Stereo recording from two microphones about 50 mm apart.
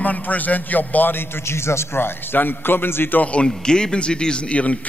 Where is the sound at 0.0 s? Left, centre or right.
Left.